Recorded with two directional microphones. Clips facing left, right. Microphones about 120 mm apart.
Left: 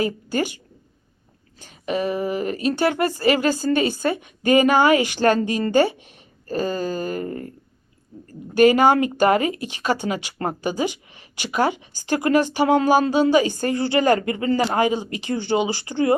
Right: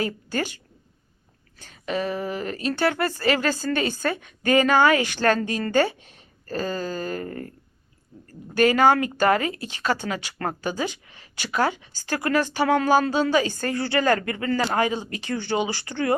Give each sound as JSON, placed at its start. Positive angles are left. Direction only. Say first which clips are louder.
{"t": 0.0, "sound": "speech", "louder": "left 4 dB", "side_deg": 15}
{"t": 8.5, "sound": "speech", "louder": "left 3 dB", "side_deg": 15}